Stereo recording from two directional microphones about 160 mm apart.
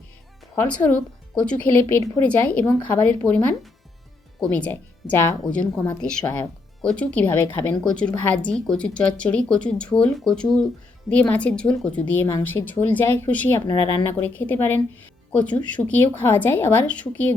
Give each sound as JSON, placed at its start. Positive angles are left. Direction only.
{"t": 0.5, "sound": "a woman's voice", "side_deg": 15}
{"t": 13.7, "sound": "a woman's voice", "side_deg": 20}